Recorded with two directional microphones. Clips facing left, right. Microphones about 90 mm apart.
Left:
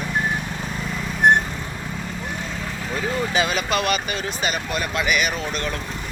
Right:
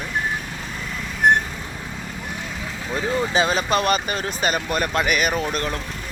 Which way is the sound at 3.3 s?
30° right (ahead or behind).